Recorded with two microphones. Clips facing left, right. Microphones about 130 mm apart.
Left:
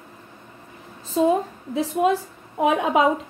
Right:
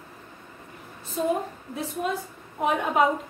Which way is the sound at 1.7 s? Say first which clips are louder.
Left 9 dB; 90° left.